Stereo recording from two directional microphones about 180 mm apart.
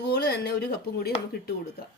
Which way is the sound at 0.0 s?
65° left (ahead or behind).